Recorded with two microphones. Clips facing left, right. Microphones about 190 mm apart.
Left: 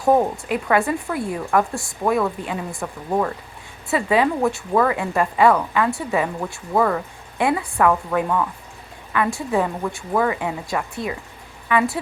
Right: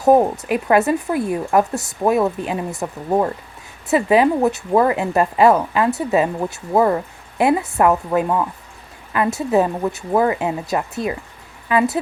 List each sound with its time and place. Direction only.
0.0 s speech: 20° right (ahead or behind)